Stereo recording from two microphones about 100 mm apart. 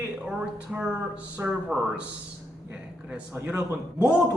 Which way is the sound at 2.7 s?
15° right (ahead or behind).